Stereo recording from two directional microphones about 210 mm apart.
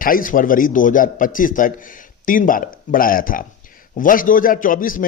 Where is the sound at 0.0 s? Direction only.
40° left (ahead or behind).